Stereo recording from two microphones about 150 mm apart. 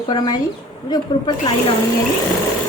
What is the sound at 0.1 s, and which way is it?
A woman's voice, 25° left (ahead or behind).